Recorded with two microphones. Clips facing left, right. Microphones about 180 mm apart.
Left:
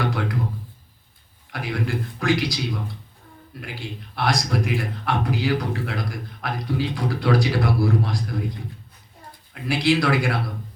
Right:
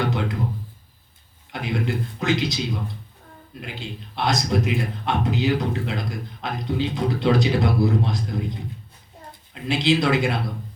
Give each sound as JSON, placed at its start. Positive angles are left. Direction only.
{"t": 0.0, "sound": "music", "side_deg": -20}
{"t": 1.5, "sound": "speech", "side_deg": -20}